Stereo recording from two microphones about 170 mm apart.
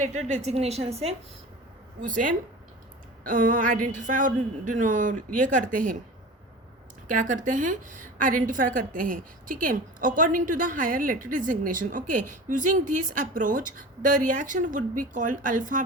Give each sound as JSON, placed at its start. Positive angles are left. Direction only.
{"t": 0.0, "sound": "a woman's voice", "side_deg": -45}
{"t": 2.0, "sound": "a woman's voice", "side_deg": -50}
{"t": 7.1, "sound": "a woman's voice", "side_deg": -50}